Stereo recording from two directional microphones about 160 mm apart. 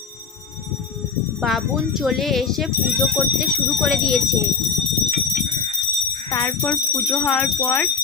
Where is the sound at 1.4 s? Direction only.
Centre (ahead or behind).